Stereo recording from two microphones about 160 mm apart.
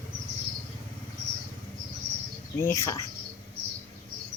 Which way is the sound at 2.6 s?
20° left (ahead or behind).